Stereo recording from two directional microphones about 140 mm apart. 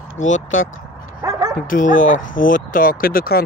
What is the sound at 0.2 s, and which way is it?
Speech, 60° left (ahead or behind).